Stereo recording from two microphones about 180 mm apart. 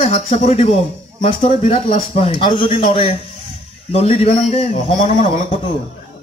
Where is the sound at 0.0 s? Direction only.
35° left (ahead or behind).